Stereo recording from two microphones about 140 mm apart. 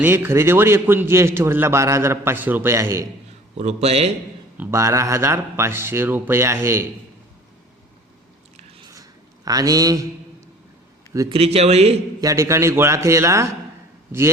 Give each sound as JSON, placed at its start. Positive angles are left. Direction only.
{"t": 0.0, "sound": "a man's voice", "side_deg": -15}
{"t": 3.6, "sound": "speech", "side_deg": -50}
{"t": 4.5, "sound": "a man's voice", "side_deg": -15}
{"t": 8.9, "sound": "a sound", "side_deg": -25}
{"t": 11.3, "sound": "speech", "side_deg": -45}
{"t": 12.2, "sound": "a man's voice", "side_deg": -20}